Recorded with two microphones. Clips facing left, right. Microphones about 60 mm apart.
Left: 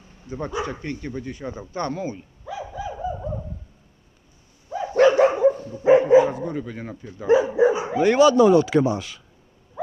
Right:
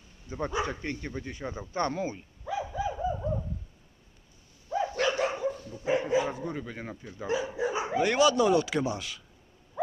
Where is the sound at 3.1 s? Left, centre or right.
Centre.